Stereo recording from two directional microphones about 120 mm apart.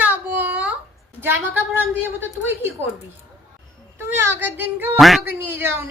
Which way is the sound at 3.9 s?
20° right (ahead or behind).